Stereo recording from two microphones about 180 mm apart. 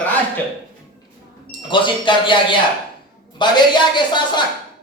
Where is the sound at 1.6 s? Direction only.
25° left (ahead or behind).